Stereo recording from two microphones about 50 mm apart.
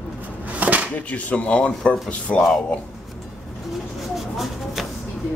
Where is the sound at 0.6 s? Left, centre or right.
Right.